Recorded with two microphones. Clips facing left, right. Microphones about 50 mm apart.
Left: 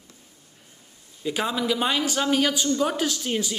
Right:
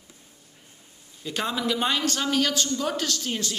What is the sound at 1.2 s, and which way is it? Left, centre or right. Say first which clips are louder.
Speech: left 2 dB; centre.